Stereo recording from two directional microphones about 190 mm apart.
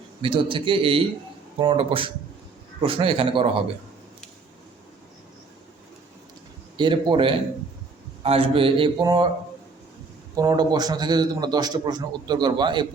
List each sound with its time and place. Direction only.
0.2 s a man's voice: 25° right (ahead or behind)
6.7 s a man's voice: 25° right (ahead or behind)
10.3 s a man's voice: 20° right (ahead or behind)